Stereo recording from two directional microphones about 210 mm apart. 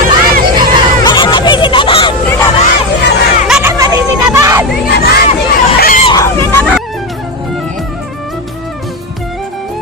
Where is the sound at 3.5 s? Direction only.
10° right (ahead or behind).